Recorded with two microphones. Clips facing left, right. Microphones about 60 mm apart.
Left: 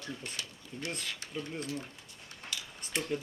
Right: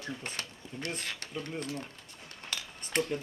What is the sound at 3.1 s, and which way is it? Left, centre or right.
Speech, centre.